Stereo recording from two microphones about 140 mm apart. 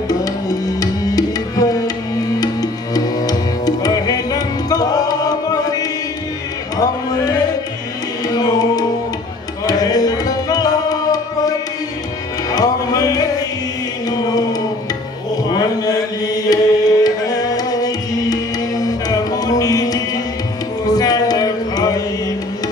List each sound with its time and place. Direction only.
0.1 s music: 25° left (ahead or behind)
14.1 s chant: 25° left (ahead or behind)
15.5 s a sound: 25° left (ahead or behind)
16.4 s music: 25° left (ahead or behind)